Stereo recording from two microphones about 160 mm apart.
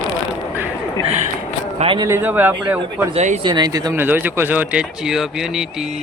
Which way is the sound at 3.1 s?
45° right (ahead or behind).